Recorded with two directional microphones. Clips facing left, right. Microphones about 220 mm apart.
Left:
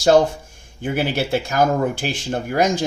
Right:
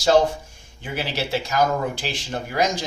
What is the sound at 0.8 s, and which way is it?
Speech, 50° left (ahead or behind).